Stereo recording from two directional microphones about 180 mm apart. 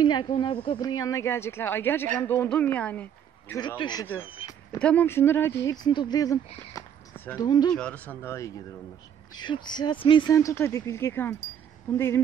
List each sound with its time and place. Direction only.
0.0 s a man's voice: 25° left (ahead or behind); by 3.5 s 10° left (ahead or behind)
3.5 s speech: 25° left (ahead or behind)
4.7 s speech: 10° left (ahead or behind)
5.7 s speech: 25° left (ahead or behind)
6.7 s a sound: 10° left (ahead or behind)
7.3 s speech: 25° left (ahead or behind)
7.7 s speech: 5° left (ahead or behind)
9.3 s speech: 25° left (ahead or behind)